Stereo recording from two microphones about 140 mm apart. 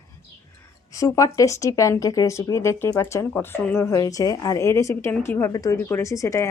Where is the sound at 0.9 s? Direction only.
25° left (ahead or behind).